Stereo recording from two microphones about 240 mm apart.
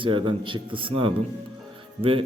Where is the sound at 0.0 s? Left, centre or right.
Right.